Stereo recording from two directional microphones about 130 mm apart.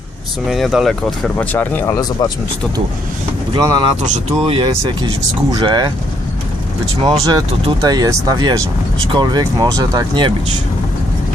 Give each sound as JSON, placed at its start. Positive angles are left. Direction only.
{"t": 0.4, "sound": "speech", "side_deg": 0}
{"t": 1.4, "sound": "speech", "side_deg": 15}
{"t": 3.5, "sound": "speech", "side_deg": -30}
{"t": 4.4, "sound": "speech", "side_deg": -45}
{"t": 7.0, "sound": "speech", "side_deg": -35}